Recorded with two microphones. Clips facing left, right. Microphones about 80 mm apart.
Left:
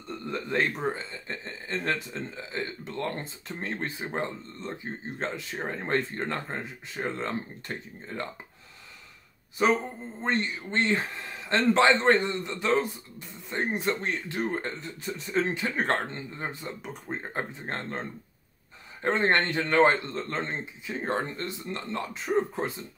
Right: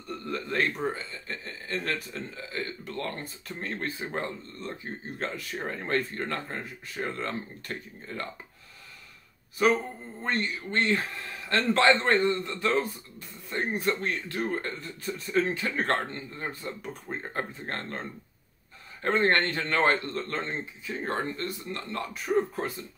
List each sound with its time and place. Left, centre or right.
0.1 s a man's voice: left
10.2 s a man's voice: left
19.0 s a man's voice: centre